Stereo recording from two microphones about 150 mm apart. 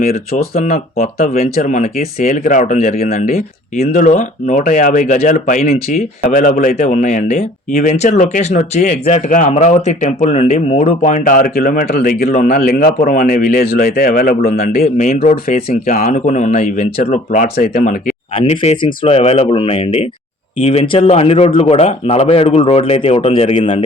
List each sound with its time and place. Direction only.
0.0 s speech: 80° left
1.6 s speech: 60° left (ahead or behind)
6.9 s speech: 50° left (ahead or behind)
18.3 s speech: 40° left (ahead or behind)